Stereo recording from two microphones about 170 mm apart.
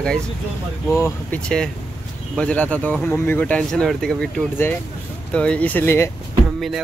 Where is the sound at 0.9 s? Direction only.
10° left (ahead or behind).